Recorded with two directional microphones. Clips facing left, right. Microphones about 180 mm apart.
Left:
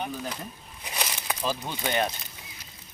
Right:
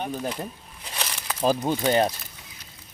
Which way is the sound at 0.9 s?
15° left (ahead or behind).